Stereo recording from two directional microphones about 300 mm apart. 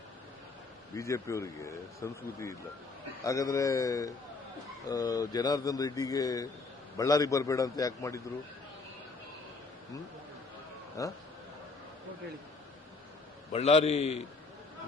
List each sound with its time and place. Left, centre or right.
0.9 s speech: centre
11.0 s speech: centre
13.5 s a man's voice: left